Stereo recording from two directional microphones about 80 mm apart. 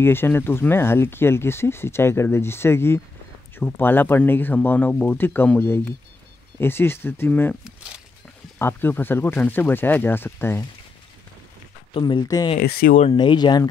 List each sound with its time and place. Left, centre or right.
0.0 s speech: left
8.5 s speech: left
11.9 s speech: left